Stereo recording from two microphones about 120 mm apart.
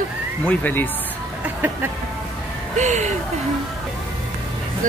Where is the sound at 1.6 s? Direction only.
15° right (ahead or behind).